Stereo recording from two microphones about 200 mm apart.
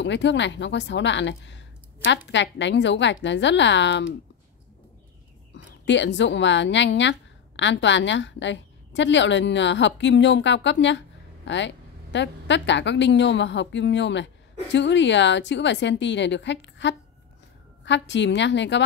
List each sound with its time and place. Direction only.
0.0 s a woman's voice: 60° left (ahead or behind)
5.9 s a woman's voice: 65° left (ahead or behind)